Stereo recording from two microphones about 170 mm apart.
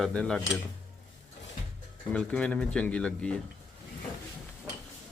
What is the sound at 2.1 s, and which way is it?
Speech, 5° left (ahead or behind).